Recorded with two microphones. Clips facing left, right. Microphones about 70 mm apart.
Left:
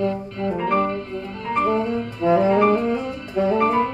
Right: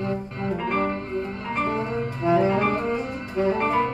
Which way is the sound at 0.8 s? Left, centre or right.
Right.